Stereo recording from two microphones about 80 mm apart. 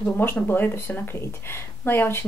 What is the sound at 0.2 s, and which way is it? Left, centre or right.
A woman's voice, left.